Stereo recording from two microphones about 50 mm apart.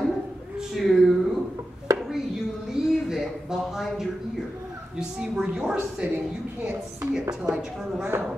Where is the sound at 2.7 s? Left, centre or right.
Centre.